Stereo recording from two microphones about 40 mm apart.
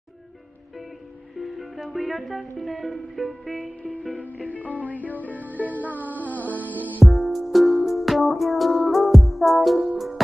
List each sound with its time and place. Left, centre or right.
1.3 s speech: centre
4.1 s music: left
5.5 s music: right
5.8 s music: left
7.0 s music: centre